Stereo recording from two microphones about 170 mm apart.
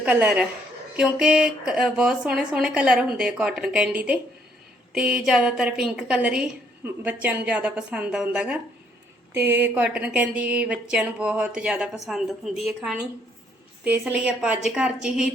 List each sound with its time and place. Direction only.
0.0 s a woman's voice: 5° right (ahead or behind)